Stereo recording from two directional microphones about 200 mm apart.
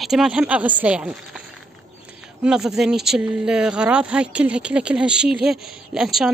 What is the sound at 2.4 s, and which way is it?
Speech, 5° right (ahead or behind).